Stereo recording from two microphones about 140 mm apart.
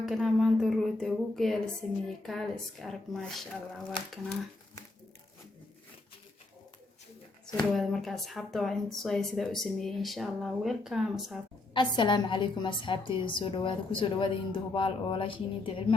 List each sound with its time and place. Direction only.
0.0 s speech: centre (ahead or behind)
7.7 s speech: centre (ahead or behind)
11.7 s a woman's voice: 35° left (ahead or behind)